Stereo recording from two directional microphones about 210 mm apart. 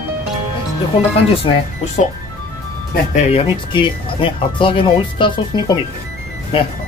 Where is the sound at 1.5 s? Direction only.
20° left (ahead or behind).